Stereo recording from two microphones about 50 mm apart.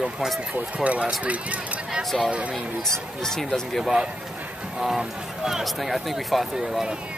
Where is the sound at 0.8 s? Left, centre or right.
Right.